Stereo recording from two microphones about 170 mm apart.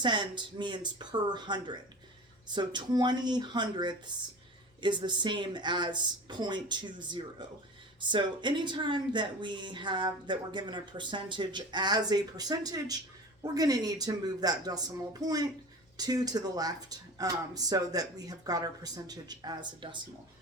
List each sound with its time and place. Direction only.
0.0 s a woman's voice: 25° right (ahead or behind)